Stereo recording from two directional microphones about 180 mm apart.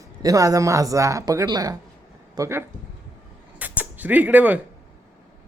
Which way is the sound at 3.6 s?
10° right (ahead or behind).